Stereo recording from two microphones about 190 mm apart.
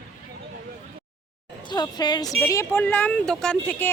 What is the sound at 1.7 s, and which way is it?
Speech, 20° left (ahead or behind).